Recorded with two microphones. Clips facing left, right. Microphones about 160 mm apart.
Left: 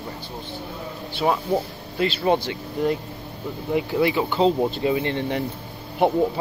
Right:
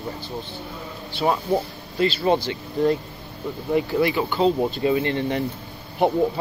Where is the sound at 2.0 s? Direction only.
15° left (ahead or behind).